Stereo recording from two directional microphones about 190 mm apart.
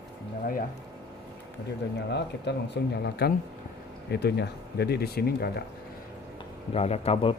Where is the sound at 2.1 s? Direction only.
65° left (ahead or behind).